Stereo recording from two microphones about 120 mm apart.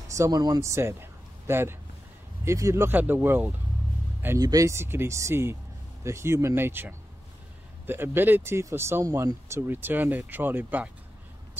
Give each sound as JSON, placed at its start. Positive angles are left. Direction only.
{"t": 0.1, "sound": "speech", "side_deg": -30}
{"t": 4.4, "sound": "speech", "side_deg": -30}